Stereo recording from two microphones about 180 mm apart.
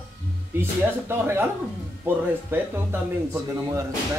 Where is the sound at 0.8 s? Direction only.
15° right (ahead or behind).